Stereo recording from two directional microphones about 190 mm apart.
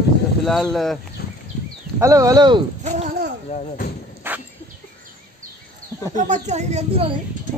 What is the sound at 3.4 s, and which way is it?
Speech, 40° left (ahead or behind).